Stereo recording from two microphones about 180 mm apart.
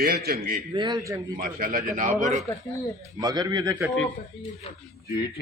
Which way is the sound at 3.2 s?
20° right (ahead or behind).